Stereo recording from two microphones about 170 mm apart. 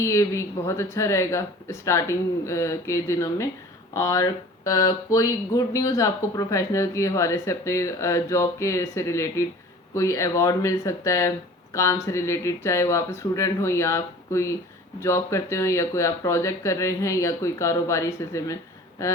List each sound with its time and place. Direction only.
0.0 s speech: 15° left (ahead or behind)